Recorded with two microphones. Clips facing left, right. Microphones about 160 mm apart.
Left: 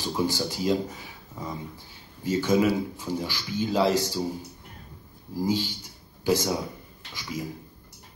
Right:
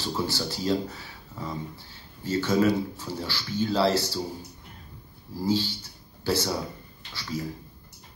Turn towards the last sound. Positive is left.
turn(degrees=15)  # may be behind; listen again after turning